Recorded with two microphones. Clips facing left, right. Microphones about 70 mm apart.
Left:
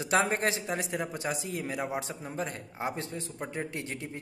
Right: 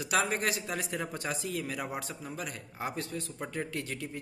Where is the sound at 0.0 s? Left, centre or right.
Left.